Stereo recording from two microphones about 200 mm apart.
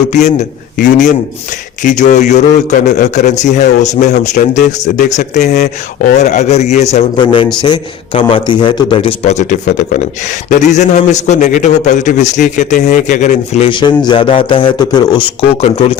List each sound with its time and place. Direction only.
0.1 s speech: 35° left (ahead or behind)